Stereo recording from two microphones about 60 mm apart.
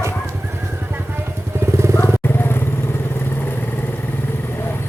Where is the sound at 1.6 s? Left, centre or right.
Right.